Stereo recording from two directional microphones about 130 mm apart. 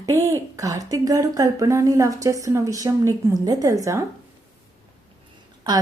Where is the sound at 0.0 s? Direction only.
25° right (ahead or behind).